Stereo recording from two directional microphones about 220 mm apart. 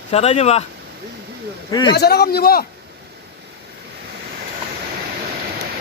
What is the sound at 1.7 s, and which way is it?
Speech, 20° left (ahead or behind).